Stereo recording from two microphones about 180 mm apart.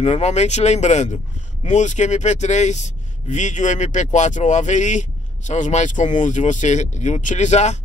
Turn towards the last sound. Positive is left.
turn(degrees=40)  # may be behind; listen again after turning